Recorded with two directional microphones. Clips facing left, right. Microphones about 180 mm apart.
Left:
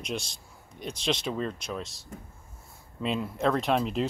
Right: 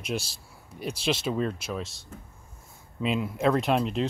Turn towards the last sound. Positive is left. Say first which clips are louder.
# right 1 dB
turn(degrees=0)  # may be behind; listen again after turning